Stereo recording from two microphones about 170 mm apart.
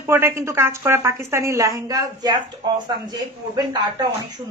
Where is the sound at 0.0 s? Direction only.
15° right (ahead or behind).